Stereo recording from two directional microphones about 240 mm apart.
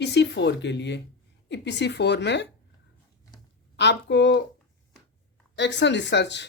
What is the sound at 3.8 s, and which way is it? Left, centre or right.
Speech, left.